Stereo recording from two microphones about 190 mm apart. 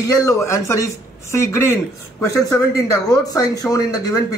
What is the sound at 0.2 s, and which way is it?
Speech, 15° left (ahead or behind).